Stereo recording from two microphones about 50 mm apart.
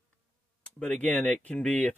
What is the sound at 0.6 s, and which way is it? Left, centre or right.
Speech, left.